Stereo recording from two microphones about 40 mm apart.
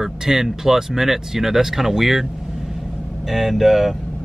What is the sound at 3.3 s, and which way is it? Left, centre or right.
Speech, centre.